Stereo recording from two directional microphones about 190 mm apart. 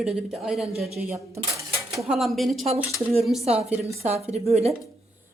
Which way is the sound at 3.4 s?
35° right (ahead or behind).